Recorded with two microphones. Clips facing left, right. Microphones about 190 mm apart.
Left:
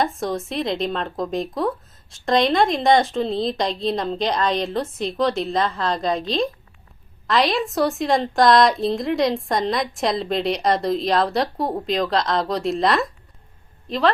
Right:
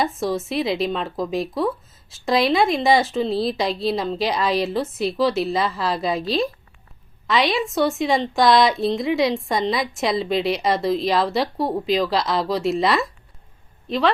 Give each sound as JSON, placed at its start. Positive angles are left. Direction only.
{"t": 0.0, "sound": "speech", "side_deg": 0}